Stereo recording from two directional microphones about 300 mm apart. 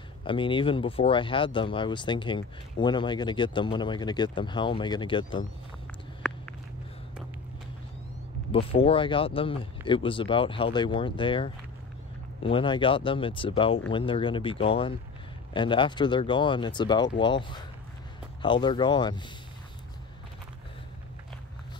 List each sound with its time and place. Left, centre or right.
0.2 s speech: centre
6.2 s a sound: centre
8.5 s speech: centre